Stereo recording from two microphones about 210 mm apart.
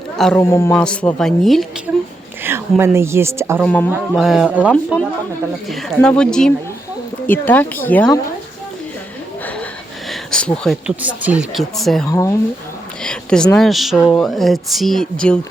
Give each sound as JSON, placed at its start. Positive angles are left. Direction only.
{"t": 0.2, "sound": "speech", "side_deg": 5}
{"t": 2.4, "sound": "speech", "side_deg": -10}
{"t": 3.6, "sound": "speech", "side_deg": 5}
{"t": 10.1, "sound": "speech", "side_deg": 5}
{"t": 12.0, "sound": "speech", "side_deg": 15}